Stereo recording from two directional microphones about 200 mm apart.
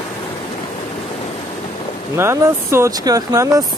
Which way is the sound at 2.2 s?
15° right (ahead or behind).